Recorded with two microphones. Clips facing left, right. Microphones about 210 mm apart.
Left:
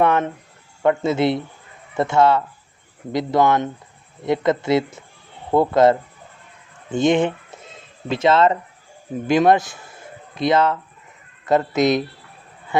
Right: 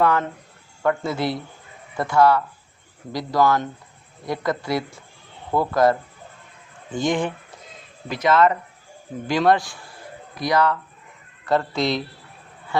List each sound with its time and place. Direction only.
0.0 s a man's voice: 20° left (ahead or behind)